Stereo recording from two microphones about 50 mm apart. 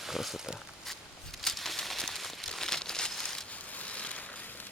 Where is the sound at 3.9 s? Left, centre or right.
Left.